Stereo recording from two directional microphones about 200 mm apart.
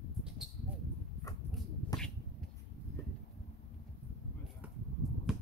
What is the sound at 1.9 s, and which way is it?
Finger snapping, 20° left (ahead or behind).